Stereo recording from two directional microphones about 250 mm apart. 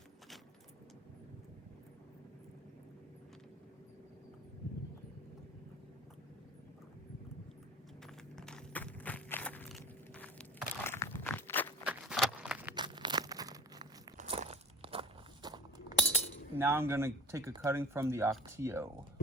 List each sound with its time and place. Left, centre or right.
8.0 s walk: centre
11.9 s a sound: centre
12.7 s tearing: centre
14.2 s crunch: right
16.0 s cutlery: centre
16.6 s speech: centre